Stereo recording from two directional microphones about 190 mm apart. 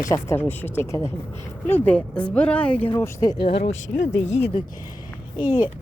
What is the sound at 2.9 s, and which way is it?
Speech, 15° left (ahead or behind).